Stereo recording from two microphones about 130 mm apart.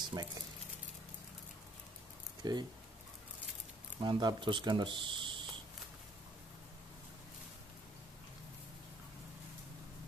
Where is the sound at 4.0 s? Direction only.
35° right (ahead or behind).